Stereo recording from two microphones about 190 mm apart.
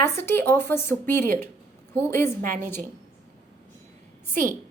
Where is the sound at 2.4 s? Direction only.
45° right (ahead or behind).